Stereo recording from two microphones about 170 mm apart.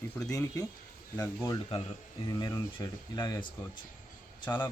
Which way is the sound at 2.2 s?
25° left (ahead or behind).